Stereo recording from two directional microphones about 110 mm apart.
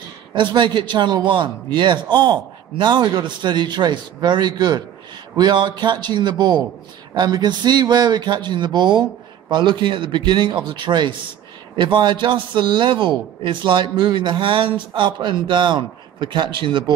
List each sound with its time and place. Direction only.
0.3 s a man's voice: 45° right (ahead or behind)